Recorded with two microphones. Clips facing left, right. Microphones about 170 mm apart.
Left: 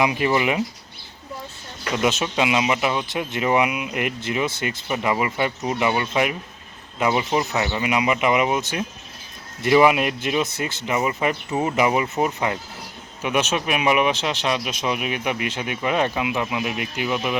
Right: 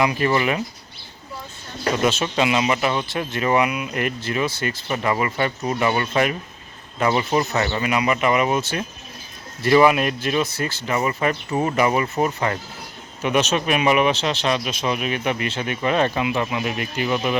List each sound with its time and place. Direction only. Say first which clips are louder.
0.0 s speech: even; 15° left (ahead or behind)
2.0 s speech: even; 15° left (ahead or behind)